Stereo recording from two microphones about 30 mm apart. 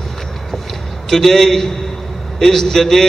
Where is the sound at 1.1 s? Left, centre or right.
Centre.